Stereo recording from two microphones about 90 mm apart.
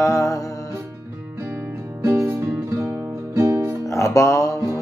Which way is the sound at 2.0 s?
30° right (ahead or behind).